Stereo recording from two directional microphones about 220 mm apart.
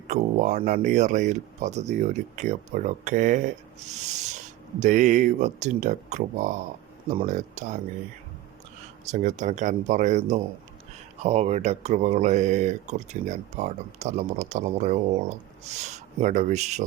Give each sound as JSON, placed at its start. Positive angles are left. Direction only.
{"t": 0.1, "sound": "speech", "side_deg": -30}
{"t": 9.0, "sound": "speech", "side_deg": -35}